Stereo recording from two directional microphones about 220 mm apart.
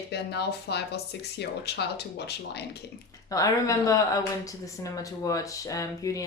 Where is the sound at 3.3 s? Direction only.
15° left (ahead or behind).